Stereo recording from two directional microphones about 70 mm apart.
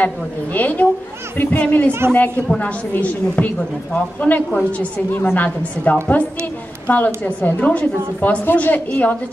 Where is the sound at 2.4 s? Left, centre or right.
Centre.